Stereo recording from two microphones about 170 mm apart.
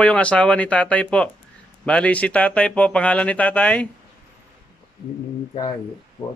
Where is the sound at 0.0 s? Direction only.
10° left (ahead or behind).